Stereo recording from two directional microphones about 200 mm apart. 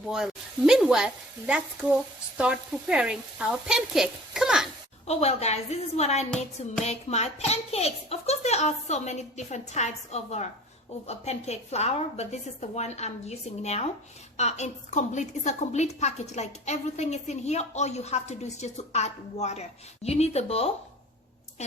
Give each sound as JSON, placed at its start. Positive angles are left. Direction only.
{"t": 0.1, "sound": "speech", "side_deg": 0}
{"t": 5.0, "sound": "a woman's voice", "side_deg": 35}